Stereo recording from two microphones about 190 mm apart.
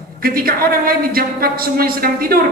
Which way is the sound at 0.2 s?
50° right (ahead or behind).